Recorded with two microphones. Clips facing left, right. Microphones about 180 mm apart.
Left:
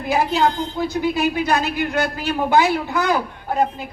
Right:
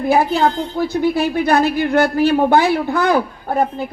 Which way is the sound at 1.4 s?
55° right (ahead or behind).